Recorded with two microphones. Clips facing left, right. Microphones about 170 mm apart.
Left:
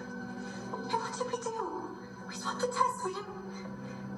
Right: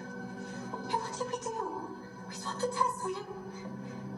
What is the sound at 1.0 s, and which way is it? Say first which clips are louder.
Speech: left 1 dB; 25° right (ahead or behind).